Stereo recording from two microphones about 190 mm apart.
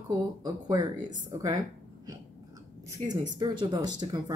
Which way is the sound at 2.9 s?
20° right (ahead or behind).